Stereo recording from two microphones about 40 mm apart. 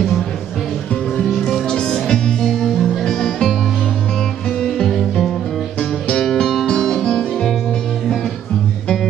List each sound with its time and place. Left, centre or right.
1.5 s music: centre
4.6 s music: centre